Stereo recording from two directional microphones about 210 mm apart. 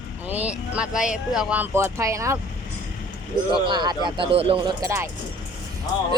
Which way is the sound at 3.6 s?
20° right (ahead or behind).